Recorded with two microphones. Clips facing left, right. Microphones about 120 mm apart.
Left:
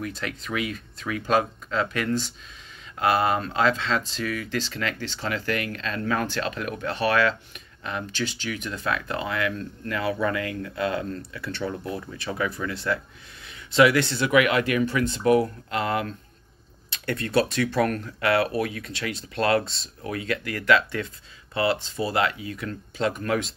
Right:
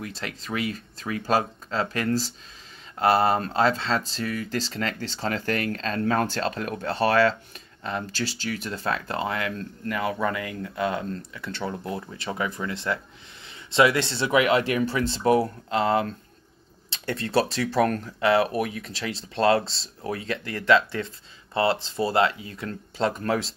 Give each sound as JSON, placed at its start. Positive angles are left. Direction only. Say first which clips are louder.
{"t": 0.0, "sound": "speech", "louder": "left 3 dB", "side_deg": -25}